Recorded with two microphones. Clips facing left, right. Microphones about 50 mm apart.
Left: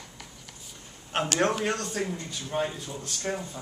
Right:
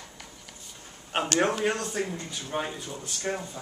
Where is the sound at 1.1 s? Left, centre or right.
Centre.